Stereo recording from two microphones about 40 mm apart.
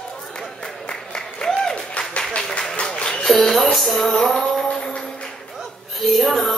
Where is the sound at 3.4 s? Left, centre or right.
Centre.